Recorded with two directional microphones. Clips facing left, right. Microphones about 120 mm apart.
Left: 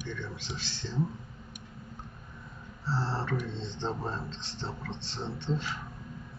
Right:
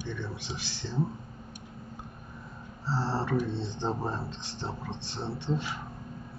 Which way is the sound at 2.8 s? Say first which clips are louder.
Right 2 dB; 15° right (ahead or behind).